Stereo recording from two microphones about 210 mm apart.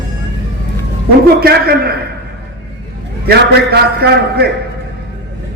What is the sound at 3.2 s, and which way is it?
A man's voice, 50° right (ahead or behind).